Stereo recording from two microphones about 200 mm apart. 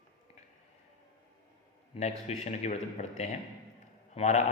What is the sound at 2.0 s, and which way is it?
Speech, 30° left (ahead or behind).